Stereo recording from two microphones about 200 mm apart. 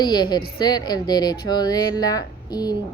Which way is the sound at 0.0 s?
20° left (ahead or behind).